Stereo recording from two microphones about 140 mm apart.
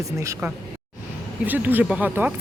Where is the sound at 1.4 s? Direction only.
10° right (ahead or behind).